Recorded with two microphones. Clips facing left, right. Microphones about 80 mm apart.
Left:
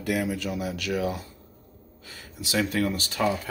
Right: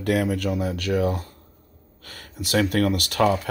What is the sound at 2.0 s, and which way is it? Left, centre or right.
Speech, right.